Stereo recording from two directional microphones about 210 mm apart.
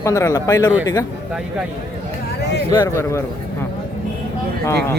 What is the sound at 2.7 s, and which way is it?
Speech, 15° left (ahead or behind).